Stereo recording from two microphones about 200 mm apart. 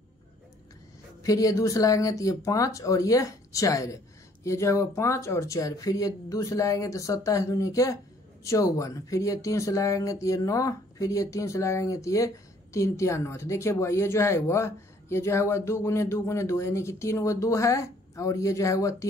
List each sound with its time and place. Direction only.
1.2 s speech: 15° left (ahead or behind)